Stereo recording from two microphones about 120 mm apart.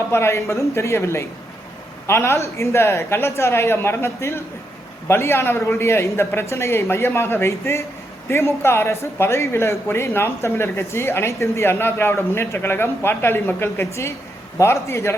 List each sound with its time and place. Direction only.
0.1 s speech: 20° left (ahead or behind)